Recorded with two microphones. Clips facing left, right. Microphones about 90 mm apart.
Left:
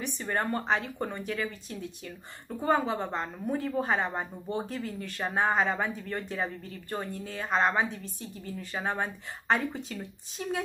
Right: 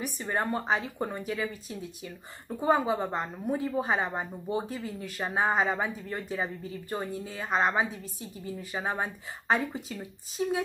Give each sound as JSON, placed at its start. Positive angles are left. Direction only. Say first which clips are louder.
{"t": 0.0, "sound": "speech", "louder": "even", "side_deg": -5}